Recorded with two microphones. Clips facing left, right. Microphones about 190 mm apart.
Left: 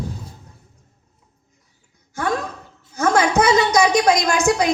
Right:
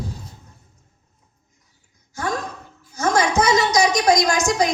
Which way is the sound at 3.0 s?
60° left (ahead or behind).